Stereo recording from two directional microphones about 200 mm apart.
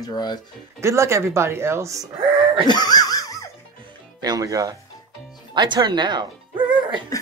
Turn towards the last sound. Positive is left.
turn(degrees=-25)  # may be behind; listen again after turning